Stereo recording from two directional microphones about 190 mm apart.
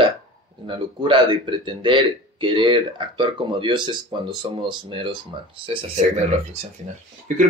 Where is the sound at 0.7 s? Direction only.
25° right (ahead or behind).